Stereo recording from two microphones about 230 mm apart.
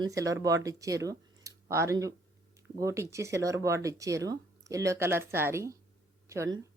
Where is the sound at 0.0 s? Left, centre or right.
Centre.